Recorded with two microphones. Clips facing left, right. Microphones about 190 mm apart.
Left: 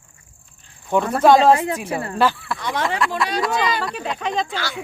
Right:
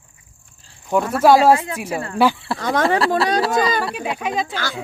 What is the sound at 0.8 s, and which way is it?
Speech, centre (ahead or behind).